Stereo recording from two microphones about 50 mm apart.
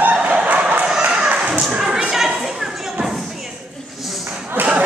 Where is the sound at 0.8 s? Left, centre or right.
Centre.